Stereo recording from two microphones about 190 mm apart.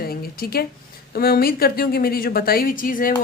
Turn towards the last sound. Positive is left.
turn(degrees=45)  # may be behind; listen again after turning